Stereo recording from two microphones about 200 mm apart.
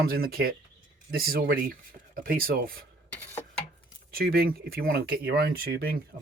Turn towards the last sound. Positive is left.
turn(degrees=-50)  # may be behind; listen again after turning